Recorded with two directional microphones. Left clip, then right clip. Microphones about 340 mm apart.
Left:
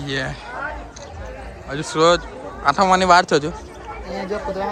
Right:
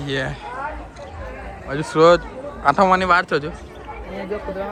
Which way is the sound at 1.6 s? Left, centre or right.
Centre.